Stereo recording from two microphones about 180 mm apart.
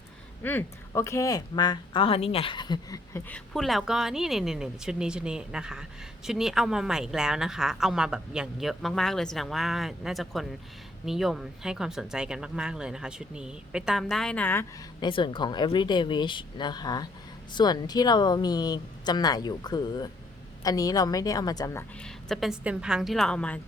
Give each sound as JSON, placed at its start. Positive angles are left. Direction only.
{"t": 0.4, "sound": "speech", "side_deg": 15}
{"t": 15.0, "sound": "speech", "side_deg": 25}
{"t": 22.0, "sound": "speech", "side_deg": 0}